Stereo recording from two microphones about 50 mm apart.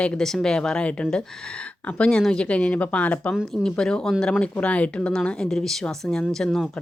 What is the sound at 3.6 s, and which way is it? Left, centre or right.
Speech, centre.